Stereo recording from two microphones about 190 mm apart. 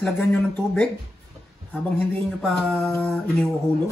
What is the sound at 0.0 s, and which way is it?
Speech, 5° left (ahead or behind).